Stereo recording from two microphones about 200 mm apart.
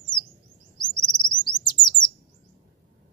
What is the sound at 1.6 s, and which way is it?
Bird, 20° left (ahead or behind).